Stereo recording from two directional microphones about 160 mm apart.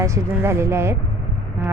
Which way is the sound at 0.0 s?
15° right (ahead or behind).